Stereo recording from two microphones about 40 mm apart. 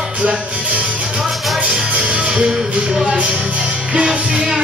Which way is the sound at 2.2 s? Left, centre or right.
Centre.